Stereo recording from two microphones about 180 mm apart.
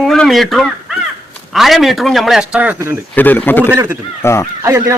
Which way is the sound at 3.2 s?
10° left (ahead or behind).